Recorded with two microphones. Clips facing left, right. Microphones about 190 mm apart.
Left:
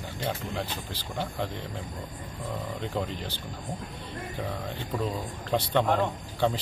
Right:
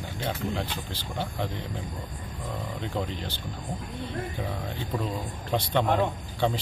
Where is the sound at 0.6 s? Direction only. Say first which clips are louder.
Right 1 dB; centre (ahead or behind).